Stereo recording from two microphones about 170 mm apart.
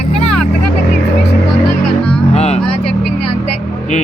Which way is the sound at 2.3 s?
40° left (ahead or behind).